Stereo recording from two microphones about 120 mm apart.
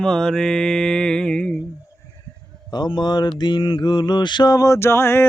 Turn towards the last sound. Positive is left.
turn(degrees=20)  # may be behind; listen again after turning